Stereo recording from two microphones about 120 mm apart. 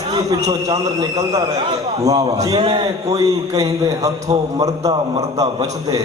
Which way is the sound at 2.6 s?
45° right (ahead or behind).